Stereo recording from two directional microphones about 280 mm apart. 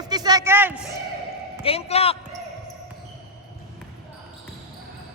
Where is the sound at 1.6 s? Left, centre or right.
Left.